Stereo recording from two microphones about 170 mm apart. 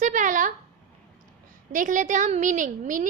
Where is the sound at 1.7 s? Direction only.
50° right (ahead or behind).